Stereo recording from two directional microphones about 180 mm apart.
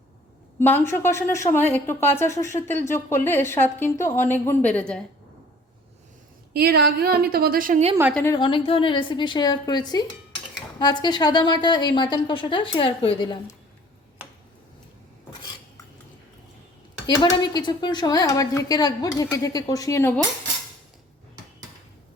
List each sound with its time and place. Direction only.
0.6 s a woman's voice: 10° left (ahead or behind)
6.5 s a woman's voice: 60° right (ahead or behind)
8.1 s a woman's voice: 15° left (ahead or behind)
8.4 s a woman's voice: 30° left (ahead or behind)
17.2 s a woman's voice: 20° left (ahead or behind)